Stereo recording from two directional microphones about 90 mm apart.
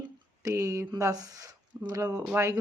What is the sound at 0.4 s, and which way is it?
Speech, 35° right (ahead or behind).